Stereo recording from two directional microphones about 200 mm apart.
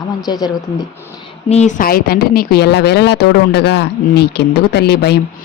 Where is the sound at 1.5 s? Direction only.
35° left (ahead or behind).